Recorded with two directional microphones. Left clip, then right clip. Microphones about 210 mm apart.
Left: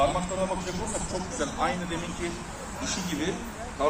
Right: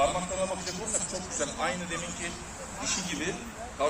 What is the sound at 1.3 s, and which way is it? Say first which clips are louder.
Speech: left 3 dB; 20° right (ahead or behind).